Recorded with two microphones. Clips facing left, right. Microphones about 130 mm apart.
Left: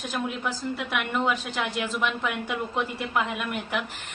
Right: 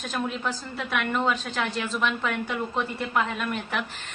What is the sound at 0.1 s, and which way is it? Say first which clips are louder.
A woman's voice: right 1 dB; 10° left (ahead or behind).